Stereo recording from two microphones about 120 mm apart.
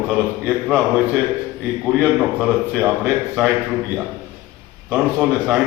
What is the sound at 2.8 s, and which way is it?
Speech, 5° right (ahead or behind).